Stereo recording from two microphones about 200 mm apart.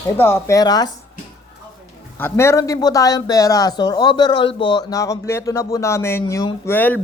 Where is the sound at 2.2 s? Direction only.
10° left (ahead or behind).